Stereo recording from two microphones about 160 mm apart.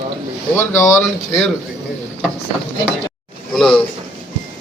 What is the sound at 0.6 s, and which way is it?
Speech, 15° left (ahead or behind).